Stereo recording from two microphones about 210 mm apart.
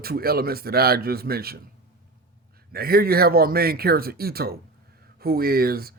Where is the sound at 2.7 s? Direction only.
45° right (ahead or behind).